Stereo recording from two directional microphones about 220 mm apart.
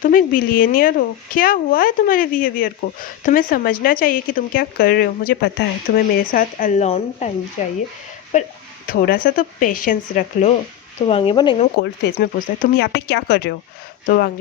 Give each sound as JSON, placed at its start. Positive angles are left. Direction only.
{"t": 0.0, "sound": "a woman's voice", "side_deg": 40}
{"t": 11.0, "sound": "speech", "side_deg": 25}
{"t": 11.8, "sound": "speech", "side_deg": 45}